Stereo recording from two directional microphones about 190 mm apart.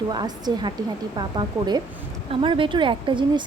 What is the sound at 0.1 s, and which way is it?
A woman's voice, 25° right (ahead or behind).